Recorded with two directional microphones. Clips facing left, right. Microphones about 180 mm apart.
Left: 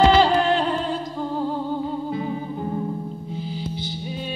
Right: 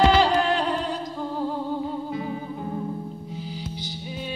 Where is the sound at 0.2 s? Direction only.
25° left (ahead or behind).